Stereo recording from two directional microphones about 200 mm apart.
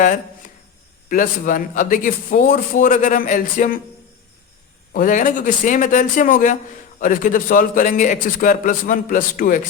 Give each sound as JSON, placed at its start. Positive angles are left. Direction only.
{"t": 1.0, "sound": "a man's voice", "side_deg": 40}
{"t": 4.9, "sound": "a man's voice", "side_deg": 40}